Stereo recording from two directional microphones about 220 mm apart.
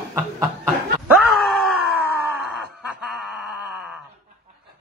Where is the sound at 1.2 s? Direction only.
Centre (ahead or behind).